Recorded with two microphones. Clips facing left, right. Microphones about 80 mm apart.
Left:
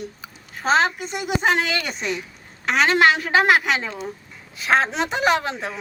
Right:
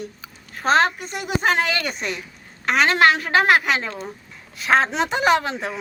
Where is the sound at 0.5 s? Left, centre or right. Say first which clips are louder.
Right 1 dB; centre.